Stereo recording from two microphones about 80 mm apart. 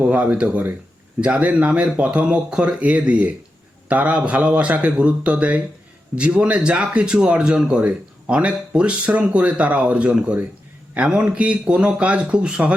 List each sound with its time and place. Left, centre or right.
0.0 s speech: centre